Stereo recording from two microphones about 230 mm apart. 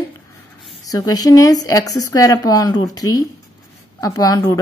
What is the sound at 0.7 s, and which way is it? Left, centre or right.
Speech, centre.